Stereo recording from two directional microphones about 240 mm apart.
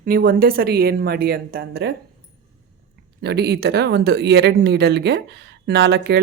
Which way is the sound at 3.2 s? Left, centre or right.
Right.